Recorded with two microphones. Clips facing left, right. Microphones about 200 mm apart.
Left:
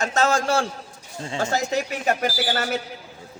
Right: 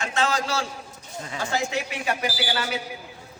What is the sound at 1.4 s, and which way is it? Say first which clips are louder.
A man's voice: left 4 dB; 40° left (ahead or behind).